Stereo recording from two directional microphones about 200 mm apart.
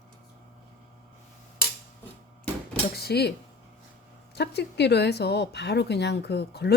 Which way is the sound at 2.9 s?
55° left (ahead or behind).